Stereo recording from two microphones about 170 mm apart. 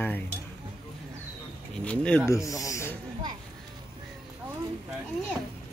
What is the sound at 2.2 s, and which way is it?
Speech, 20° left (ahead or behind).